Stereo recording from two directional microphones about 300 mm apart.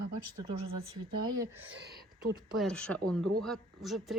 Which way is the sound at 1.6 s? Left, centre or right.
Right.